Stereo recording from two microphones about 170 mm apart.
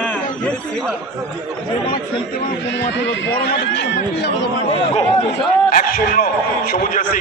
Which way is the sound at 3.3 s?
85° left.